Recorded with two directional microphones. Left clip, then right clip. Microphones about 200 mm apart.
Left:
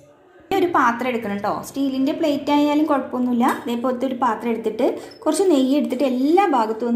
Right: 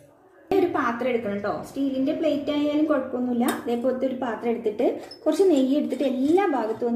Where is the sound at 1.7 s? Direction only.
35° left (ahead or behind).